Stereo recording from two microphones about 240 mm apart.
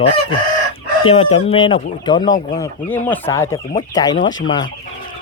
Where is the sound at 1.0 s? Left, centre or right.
Left.